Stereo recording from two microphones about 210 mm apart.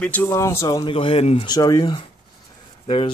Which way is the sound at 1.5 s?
15° left (ahead or behind).